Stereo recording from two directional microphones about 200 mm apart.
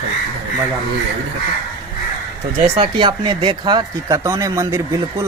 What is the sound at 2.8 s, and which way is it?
Speech, 25° right (ahead or behind).